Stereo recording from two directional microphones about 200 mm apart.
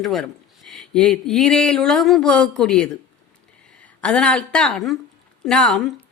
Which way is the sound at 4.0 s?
5° left (ahead or behind).